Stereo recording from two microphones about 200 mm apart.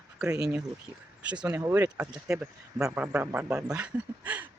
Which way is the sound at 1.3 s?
10° right (ahead or behind).